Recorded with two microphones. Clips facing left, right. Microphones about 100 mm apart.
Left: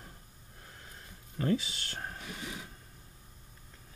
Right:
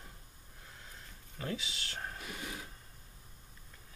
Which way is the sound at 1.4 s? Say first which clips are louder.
Left 9 dB; 40° left (ahead or behind).